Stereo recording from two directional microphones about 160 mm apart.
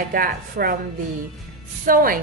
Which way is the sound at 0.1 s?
65° right (ahead or behind).